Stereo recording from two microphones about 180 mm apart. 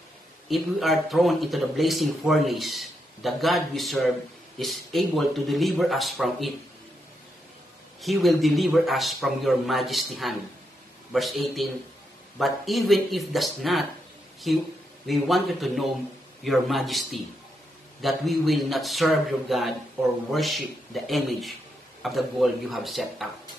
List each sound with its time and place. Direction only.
0.5 s speech: centre (ahead or behind)
8.0 s speech: centre (ahead or behind)